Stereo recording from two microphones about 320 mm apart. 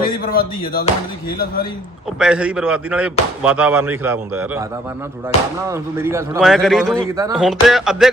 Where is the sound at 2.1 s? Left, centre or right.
Centre.